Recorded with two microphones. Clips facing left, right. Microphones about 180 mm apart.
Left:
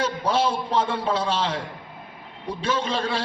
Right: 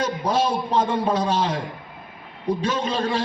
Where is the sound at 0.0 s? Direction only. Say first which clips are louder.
Right 1 dB; 15° right (ahead or behind).